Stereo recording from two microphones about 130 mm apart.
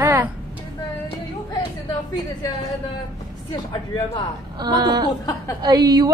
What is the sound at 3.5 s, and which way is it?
Speech, 35° left (ahead or behind).